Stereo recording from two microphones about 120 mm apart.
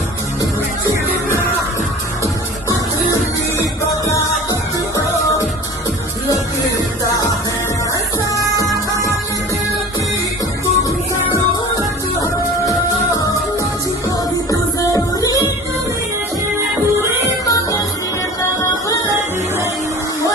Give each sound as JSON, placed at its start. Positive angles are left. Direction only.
{"t": 2.2, "sound": "music", "side_deg": 25}
{"t": 8.4, "sound": "music", "side_deg": -25}
{"t": 14.5, "sound": "music", "side_deg": 30}
{"t": 17.4, "sound": "music", "side_deg": 30}